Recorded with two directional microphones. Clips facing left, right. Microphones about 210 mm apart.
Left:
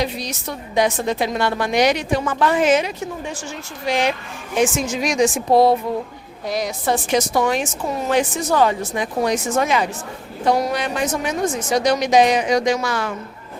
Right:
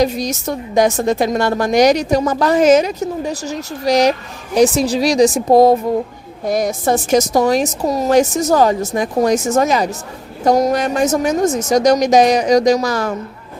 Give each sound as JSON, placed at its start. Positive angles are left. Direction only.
{"t": 0.0, "sound": "a woman's voice", "side_deg": -45}